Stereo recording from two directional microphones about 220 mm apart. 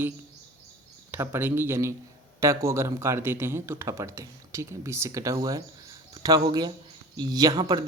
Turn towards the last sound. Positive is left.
turn(degrees=-20)  # may be behind; listen again after turning